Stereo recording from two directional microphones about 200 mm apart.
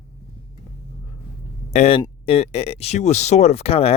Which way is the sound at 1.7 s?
30° left (ahead or behind).